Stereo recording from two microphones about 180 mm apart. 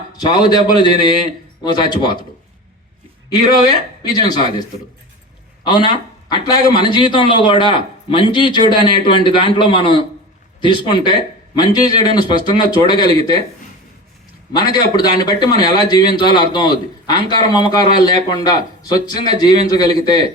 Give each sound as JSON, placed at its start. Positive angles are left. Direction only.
{"t": 0.2, "sound": "a man's voice", "side_deg": 25}
{"t": 3.2, "sound": "a man's voice", "side_deg": 20}
{"t": 5.6, "sound": "a man's voice", "side_deg": 25}
{"t": 14.5, "sound": "a man's voice", "side_deg": 25}